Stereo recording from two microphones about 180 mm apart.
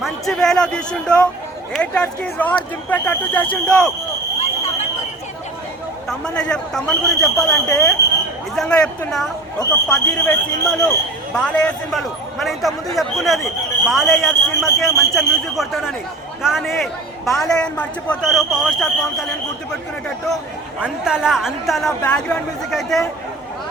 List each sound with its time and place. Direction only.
0.0 s a man's voice: centre (ahead or behind)
4.4 s a sound: 40° left (ahead or behind)
6.1 s a man's voice: 5° left (ahead or behind)
20.8 s a man's voice: 5° right (ahead or behind)